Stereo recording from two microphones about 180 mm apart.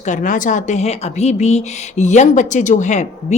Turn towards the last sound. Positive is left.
turn(degrees=40)  # may be behind; listen again after turning